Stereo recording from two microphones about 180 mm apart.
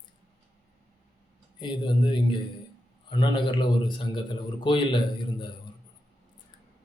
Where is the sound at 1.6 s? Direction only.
25° left (ahead or behind).